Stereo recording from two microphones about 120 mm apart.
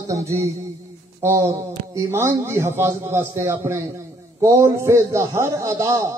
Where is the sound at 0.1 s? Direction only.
25° right (ahead or behind).